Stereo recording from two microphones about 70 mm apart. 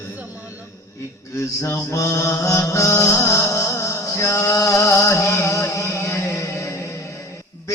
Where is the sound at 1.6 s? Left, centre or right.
Left.